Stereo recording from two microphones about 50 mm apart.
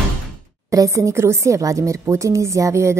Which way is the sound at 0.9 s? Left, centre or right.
Right.